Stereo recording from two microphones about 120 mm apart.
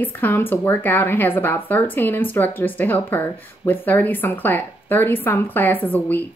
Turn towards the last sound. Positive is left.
turn(degrees=15)  # may be behind; listen again after turning